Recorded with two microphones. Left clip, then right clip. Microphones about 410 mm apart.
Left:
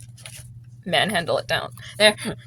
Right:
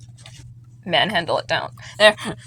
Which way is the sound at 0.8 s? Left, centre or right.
Left.